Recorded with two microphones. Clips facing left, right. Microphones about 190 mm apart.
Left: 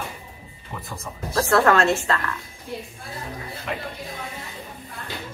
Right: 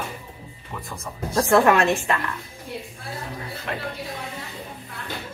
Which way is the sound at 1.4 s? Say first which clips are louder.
Right 1 dB; 15° right (ahead or behind).